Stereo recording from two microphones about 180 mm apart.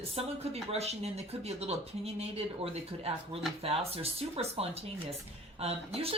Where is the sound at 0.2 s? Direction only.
30° right (ahead or behind).